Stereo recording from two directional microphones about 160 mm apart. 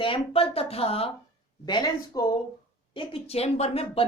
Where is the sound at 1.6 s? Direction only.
25° left (ahead or behind).